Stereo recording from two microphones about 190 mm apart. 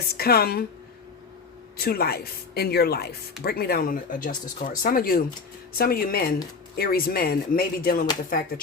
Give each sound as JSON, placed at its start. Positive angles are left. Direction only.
{"t": 0.1, "sound": "a woman's voice", "side_deg": 55}
{"t": 1.8, "sound": "a woman's voice", "side_deg": 55}